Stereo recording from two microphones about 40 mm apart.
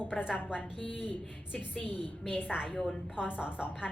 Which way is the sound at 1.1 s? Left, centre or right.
Left.